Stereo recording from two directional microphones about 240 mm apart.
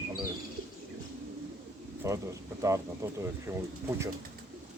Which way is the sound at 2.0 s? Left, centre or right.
Centre.